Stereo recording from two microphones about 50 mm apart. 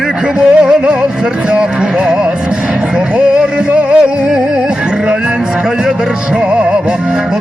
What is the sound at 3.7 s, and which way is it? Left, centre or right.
Music, right.